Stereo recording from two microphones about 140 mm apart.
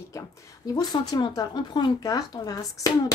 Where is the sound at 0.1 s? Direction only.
20° left (ahead or behind).